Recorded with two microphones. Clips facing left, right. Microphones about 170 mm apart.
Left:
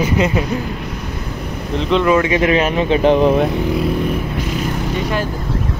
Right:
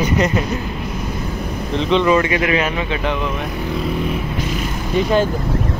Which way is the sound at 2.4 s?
35° left (ahead or behind).